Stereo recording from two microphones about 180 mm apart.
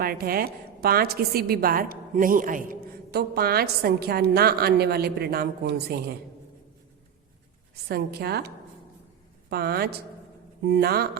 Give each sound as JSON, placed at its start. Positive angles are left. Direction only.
{"t": 0.0, "sound": "a woman's voice", "side_deg": -55}
{"t": 7.9, "sound": "a woman's voice", "side_deg": -60}